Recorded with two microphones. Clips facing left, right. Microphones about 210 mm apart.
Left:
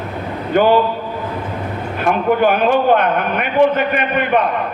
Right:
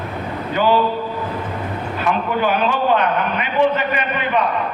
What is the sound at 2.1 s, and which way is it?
A man's voice, 50° left (ahead or behind).